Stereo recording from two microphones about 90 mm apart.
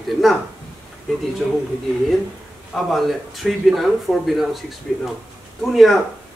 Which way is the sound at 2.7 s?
Centre (ahead or behind).